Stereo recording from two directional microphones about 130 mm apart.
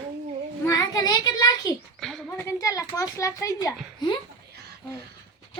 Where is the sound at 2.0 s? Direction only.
5° left (ahead or behind).